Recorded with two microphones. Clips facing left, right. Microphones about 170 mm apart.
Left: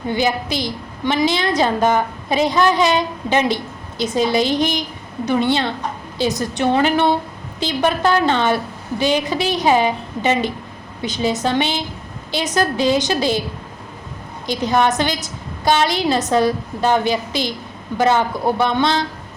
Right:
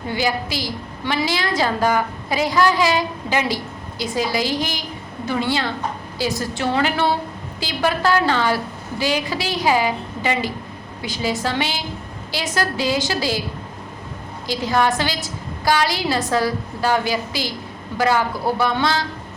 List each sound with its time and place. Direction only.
0.1 s a woman's voice: 20° left (ahead or behind)
14.4 s a woman's voice: 20° left (ahead or behind)